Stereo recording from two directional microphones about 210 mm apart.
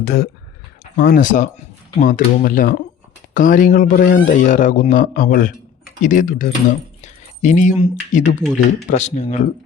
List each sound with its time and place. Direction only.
0.0 s speech: 50° left (ahead or behind); by 9.5 s 35° left (ahead or behind)